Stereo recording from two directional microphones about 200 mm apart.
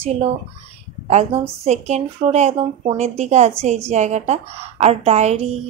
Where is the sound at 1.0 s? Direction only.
35° right (ahead or behind).